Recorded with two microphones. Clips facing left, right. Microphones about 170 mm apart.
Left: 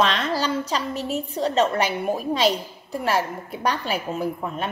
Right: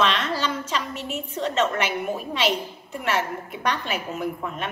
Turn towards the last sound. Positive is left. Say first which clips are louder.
# left 3 dB
turn(degrees=35)  # may be behind; listen again after turning